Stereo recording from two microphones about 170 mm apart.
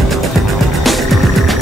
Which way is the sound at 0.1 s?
Centre (ahead or behind).